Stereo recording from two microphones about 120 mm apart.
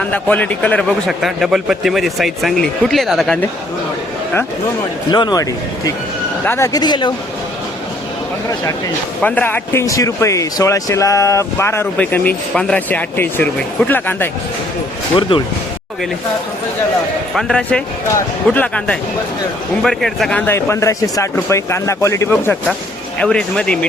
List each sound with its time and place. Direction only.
0.0 s a man's voice: 10° left (ahead or behind)
5.1 s speech: 35° left (ahead or behind)
6.4 s speech: 20° left (ahead or behind)
6.7 s speech: 40° left (ahead or behind)
9.2 s speech: 15° left (ahead or behind)
9.8 s speech: 30° left (ahead or behind)
15.3 s speech: 45° left (ahead or behind)
17.3 s a man's voice: 10° left (ahead or behind)
20.4 s speech: 20° left (ahead or behind)
23.1 s speech: 10° left (ahead or behind)